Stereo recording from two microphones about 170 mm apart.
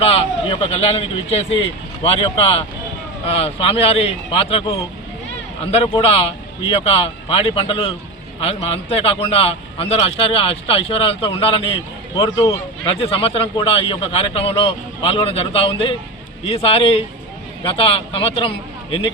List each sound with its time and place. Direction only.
0.0 s a man's voice: 35° left (ahead or behind)